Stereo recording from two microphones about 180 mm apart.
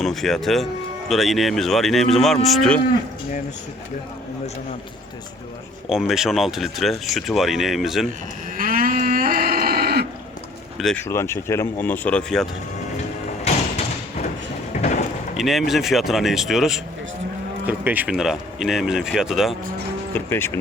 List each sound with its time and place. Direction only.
0.0 s speech: centre (ahead or behind)
5.9 s speech: centre (ahead or behind)
8.5 s livestock: 50° right (ahead or behind)
10.8 s speech: centre (ahead or behind)
11.0 s speech: 15° left (ahead or behind)
13.4 s thump: 35° left (ahead or behind)
14.7 s a sound: 40° left (ahead or behind)
15.4 s speech: centre (ahead or behind)
20.1 s speech: 15° left (ahead or behind)